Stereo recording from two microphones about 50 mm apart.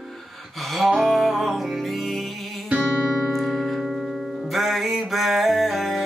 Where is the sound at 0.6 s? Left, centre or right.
Centre.